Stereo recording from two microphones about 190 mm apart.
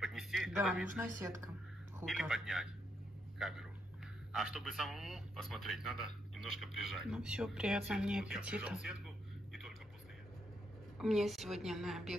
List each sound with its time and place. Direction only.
0.0 s a sound: centre (ahead or behind)
0.9 s speech: 15° right (ahead or behind)
2.0 s a man's voice: centre (ahead or behind)
11.0 s a man's voice: centre (ahead or behind)